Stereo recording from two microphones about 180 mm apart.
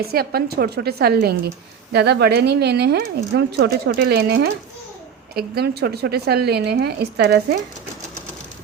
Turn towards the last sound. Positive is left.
turn(degrees=-65)  # may be behind; listen again after turning